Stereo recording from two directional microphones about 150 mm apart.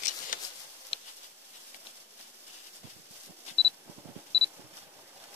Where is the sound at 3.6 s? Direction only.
Centre (ahead or behind).